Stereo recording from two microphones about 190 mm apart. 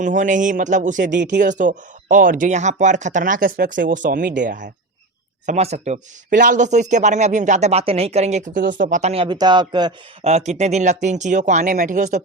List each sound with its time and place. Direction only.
0.0 s a man's voice: 40° right (ahead or behind); by 9.9 s 25° right (ahead or behind)
10.2 s speech: 35° right (ahead or behind)